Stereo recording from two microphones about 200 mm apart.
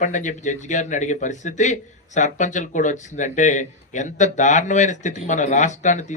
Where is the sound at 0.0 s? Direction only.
40° left (ahead or behind).